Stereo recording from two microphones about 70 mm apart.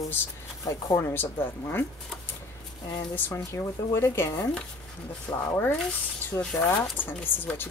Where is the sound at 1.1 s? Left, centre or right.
Left.